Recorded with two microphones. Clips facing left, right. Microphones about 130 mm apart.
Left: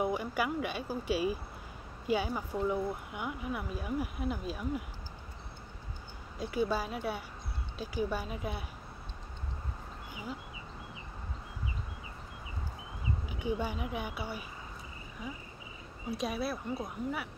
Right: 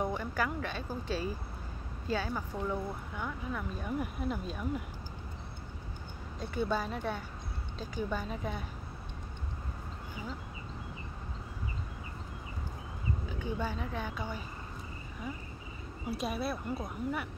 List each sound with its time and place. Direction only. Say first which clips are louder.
0.0 s speech: left 1 dB; 10° left (ahead or behind)
6.4 s speech: left 1 dB; 5° left (ahead or behind)
13.3 s speech: left 3 dB; 15° left (ahead or behind)
16.1 s speech: even; centre (ahead or behind)